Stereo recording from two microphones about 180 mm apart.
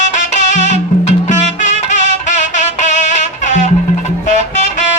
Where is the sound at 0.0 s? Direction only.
40° left (ahead or behind).